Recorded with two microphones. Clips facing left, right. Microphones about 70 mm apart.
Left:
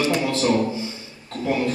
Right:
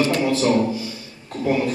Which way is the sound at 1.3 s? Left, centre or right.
Centre.